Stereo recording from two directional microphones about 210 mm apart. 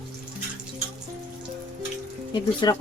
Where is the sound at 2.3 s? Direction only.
20° left (ahead or behind).